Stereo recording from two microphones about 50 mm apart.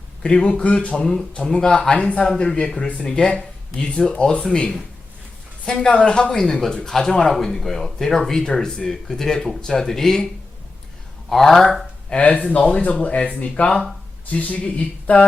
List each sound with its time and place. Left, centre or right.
0.2 s speech: centre
11.3 s speech: centre
12.0 s speech: left